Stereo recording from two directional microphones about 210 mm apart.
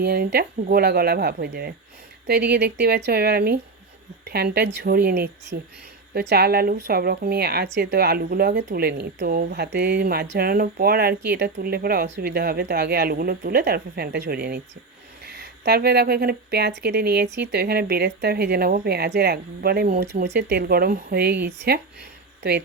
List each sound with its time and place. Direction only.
0.0 s speech: 50° right (ahead or behind)